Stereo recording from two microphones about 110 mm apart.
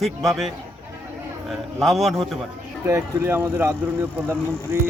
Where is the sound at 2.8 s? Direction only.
25° right (ahead or behind).